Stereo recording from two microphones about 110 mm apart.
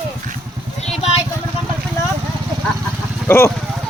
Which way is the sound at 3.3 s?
20° left (ahead or behind).